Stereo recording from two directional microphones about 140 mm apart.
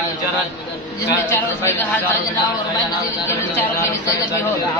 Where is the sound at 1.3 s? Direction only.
20° left (ahead or behind).